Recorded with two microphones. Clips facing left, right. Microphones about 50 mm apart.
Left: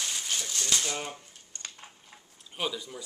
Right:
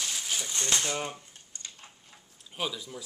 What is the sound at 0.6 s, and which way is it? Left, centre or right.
Speech, right.